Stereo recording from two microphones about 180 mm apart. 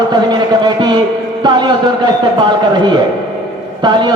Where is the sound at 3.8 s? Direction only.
25° right (ahead or behind).